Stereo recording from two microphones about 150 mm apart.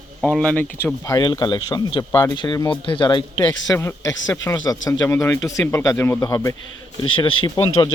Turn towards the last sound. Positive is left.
turn(degrees=30)  # may be behind; listen again after turning